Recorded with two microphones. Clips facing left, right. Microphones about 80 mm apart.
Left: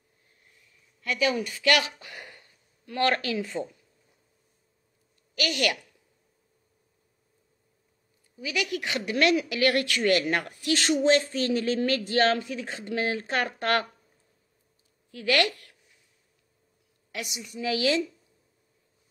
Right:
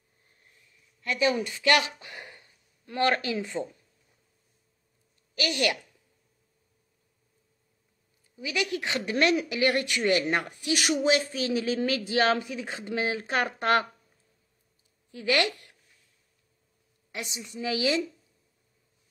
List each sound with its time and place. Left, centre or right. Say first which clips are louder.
1.0 s speech: right 1 dB; right
5.3 s a woman's voice: even; right
8.4 s speech: even; right
15.0 s speech: left 1 dB; right
17.1 s speech: left 1 dB; right